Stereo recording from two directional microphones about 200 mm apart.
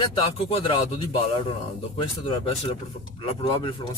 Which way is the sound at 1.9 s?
25° left (ahead or behind).